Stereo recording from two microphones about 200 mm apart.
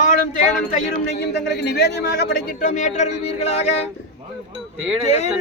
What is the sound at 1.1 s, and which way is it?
A man's voice, 55° left (ahead or behind).